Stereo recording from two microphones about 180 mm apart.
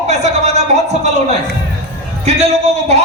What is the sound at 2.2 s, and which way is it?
Speech, 40° right (ahead or behind).